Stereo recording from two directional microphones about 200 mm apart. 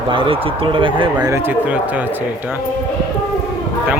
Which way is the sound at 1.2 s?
10° right (ahead or behind).